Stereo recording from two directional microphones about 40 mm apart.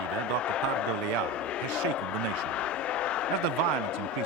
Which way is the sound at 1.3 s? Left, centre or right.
Left.